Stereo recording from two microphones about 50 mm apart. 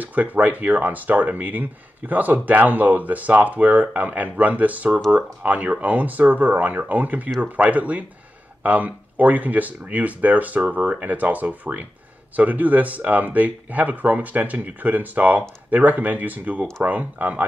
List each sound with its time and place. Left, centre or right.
0.0 s speech: right